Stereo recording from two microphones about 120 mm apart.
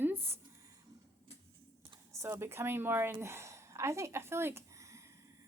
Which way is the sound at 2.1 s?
25° right (ahead or behind).